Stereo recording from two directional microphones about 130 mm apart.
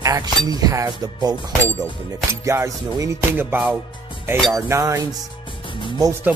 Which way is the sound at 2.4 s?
20° right (ahead or behind).